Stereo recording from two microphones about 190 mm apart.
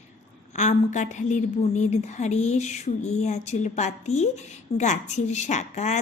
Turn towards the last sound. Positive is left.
turn(degrees=35)  # may be behind; listen again after turning